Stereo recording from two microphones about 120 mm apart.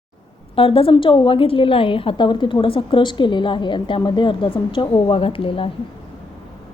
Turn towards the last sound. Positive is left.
turn(degrees=50)  # may be behind; listen again after turning